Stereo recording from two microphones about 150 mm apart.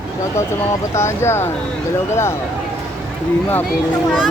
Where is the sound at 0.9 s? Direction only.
20° left (ahead or behind).